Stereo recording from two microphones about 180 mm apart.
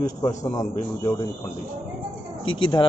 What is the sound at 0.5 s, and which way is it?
Speech, 25° left (ahead or behind).